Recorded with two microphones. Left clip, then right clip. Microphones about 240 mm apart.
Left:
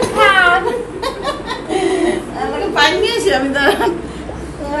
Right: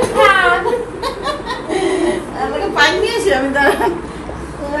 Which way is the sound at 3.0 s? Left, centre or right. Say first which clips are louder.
Even; centre.